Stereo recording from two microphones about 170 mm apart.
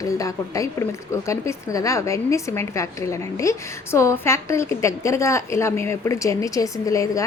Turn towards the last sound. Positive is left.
turn(degrees=20)  # may be behind; listen again after turning